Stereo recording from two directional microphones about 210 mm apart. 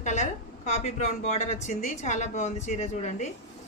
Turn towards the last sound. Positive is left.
turn(degrees=35)  # may be behind; listen again after turning